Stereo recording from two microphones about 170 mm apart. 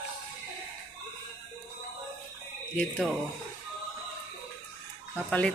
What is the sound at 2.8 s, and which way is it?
Speech, 5° left (ahead or behind).